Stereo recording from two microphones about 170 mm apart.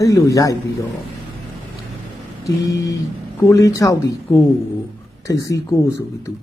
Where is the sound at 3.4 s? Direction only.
20° left (ahead or behind).